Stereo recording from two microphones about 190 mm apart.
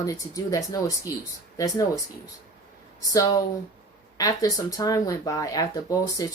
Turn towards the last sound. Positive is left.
turn(degrees=20)  # may be behind; listen again after turning